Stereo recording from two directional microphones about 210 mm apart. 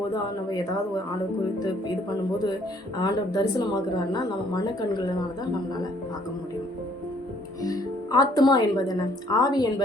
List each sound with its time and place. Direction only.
3.0 s a woman's voice: 20° left (ahead or behind)
7.6 s a woman's voice: 15° left (ahead or behind)